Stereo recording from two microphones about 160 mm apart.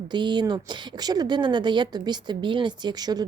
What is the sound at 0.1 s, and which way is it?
Speech, 30° right (ahead or behind).